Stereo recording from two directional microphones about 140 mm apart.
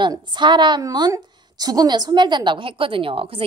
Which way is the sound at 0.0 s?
35° right (ahead or behind).